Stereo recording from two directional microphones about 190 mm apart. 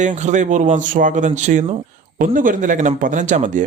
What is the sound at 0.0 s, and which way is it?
Speech, 40° right (ahead or behind).